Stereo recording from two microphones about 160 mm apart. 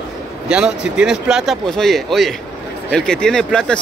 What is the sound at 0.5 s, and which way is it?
Speech, 5° right (ahead or behind).